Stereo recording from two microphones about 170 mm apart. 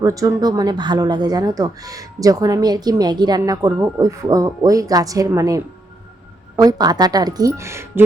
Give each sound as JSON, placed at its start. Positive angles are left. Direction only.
{"t": 0.0, "sound": "speech", "side_deg": -20}